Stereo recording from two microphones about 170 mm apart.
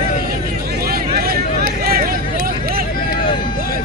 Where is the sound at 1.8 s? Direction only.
60° right (ahead or behind).